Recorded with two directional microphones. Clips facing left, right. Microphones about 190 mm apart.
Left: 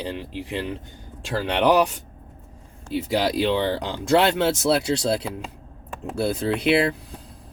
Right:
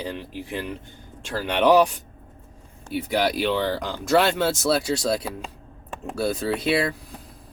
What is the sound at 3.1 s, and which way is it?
Speech, 25° left (ahead or behind).